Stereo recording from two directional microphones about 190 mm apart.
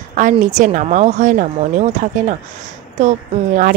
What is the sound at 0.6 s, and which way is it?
Speech, 40° right (ahead or behind).